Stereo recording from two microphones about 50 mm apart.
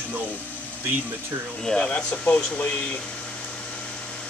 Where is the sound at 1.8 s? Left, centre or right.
Left.